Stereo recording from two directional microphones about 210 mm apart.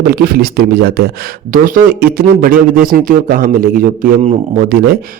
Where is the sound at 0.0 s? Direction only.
50° right (ahead or behind).